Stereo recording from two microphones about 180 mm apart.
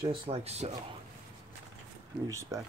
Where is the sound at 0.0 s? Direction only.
30° right (ahead or behind).